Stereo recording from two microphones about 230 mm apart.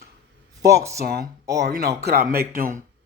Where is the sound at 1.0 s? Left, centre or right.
Right.